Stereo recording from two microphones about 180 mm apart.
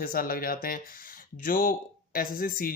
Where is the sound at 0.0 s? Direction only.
55° left (ahead or behind).